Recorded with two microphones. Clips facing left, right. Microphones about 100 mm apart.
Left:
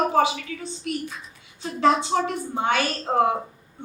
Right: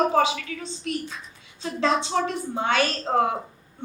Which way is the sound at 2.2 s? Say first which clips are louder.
Left 1 dB; 30° left (ahead or behind).